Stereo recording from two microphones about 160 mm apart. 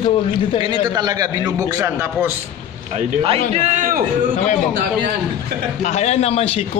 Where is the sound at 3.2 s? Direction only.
35° right (ahead or behind).